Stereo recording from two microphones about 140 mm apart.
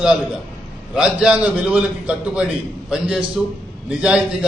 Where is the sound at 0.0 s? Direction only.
5° right (ahead or behind).